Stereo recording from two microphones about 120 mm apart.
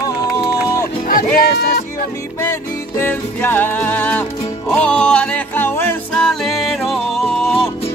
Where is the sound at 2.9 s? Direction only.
15° left (ahead or behind).